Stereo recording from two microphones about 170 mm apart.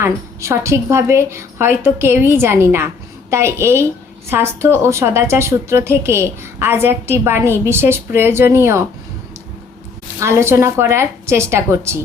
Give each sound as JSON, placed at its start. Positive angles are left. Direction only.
{"t": 0.0, "sound": "a woman's voice", "side_deg": -15}
{"t": 10.2, "sound": "a woman's voice", "side_deg": -15}